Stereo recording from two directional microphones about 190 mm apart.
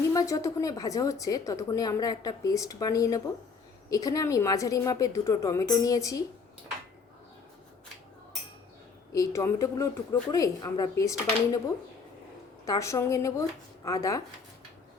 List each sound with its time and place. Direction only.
0.1 s a woman's voice: 20° left (ahead or behind)
9.1 s a woman's voice: 15° left (ahead or behind)
12.6 s a woman's voice: 15° left (ahead or behind)